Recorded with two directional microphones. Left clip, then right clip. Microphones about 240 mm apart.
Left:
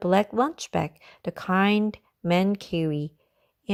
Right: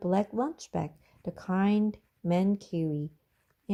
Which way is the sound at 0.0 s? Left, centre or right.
Left.